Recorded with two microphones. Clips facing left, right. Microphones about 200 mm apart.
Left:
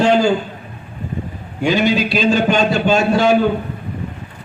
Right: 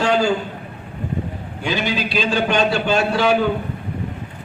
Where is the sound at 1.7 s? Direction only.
45° left (ahead or behind).